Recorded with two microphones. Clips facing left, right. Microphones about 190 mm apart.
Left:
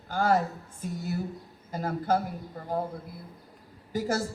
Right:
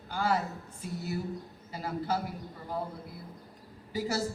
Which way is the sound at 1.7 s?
50° left (ahead or behind).